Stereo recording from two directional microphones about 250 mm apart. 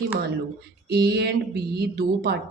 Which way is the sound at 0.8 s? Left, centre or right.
Right.